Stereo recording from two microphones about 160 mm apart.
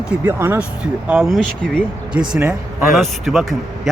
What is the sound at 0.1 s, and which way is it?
Speech, 15° right (ahead or behind).